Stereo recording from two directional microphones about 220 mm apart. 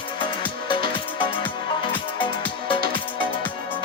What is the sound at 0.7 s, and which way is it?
Music, 20° left (ahead or behind).